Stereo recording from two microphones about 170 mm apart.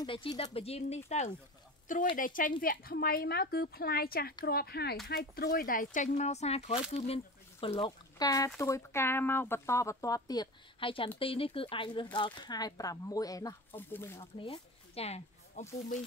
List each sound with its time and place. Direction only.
0.0 s speech: 30° left (ahead or behind)
2.1 s a woman's voice: 50° left (ahead or behind); by 7.8 s 35° left (ahead or behind)
8.2 s speech: 20° left (ahead or behind)
14.4 s a sound: 35° left (ahead or behind)